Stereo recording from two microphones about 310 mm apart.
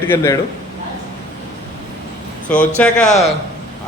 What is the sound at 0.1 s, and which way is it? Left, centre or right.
Speech, centre.